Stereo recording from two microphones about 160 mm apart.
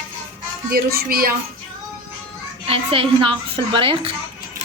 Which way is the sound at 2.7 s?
35° right (ahead or behind).